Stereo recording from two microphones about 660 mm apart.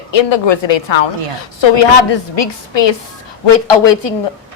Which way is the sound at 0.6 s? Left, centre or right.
Left.